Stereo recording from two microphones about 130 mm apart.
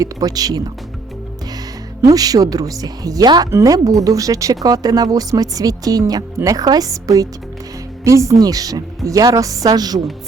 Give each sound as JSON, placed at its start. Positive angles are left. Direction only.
{"t": 0.0, "sound": "speech", "side_deg": -25}
{"t": 2.0, "sound": "speech", "side_deg": -30}